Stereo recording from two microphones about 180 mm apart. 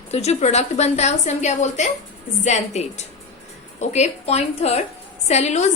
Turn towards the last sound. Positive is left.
turn(degrees=40)  # may be behind; listen again after turning